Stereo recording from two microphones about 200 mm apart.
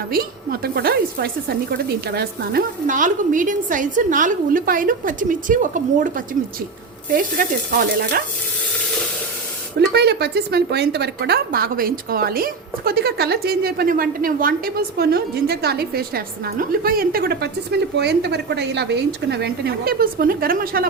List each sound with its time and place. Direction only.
0.1 s a woman's voice: 50° right (ahead or behind)
9.7 s a woman's voice: 55° right (ahead or behind)